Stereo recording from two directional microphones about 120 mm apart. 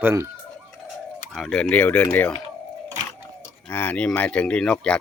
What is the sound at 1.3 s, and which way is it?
Speech, 5° left (ahead or behind).